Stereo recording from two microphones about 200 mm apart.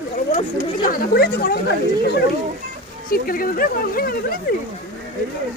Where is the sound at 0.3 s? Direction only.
30° left (ahead or behind).